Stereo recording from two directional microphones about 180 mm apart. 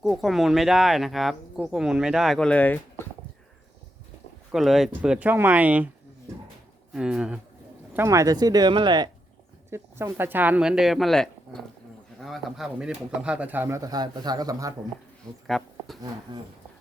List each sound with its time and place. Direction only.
0.0 s speech: centre (ahead or behind)
4.5 s speech: centre (ahead or behind)
6.9 s speech: 5° right (ahead or behind)
7.9 s speech: 15° right (ahead or behind)
9.6 s speech: 15° right (ahead or behind)
15.4 s speech: centre (ahead or behind)
16.3 s speech: 25° right (ahead or behind)